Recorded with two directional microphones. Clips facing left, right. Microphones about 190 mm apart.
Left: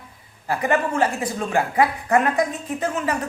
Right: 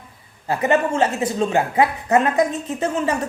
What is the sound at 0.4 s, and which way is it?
A woman's voice, 25° right (ahead or behind).